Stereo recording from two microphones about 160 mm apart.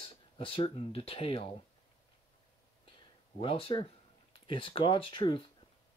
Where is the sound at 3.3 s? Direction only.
35° left (ahead or behind).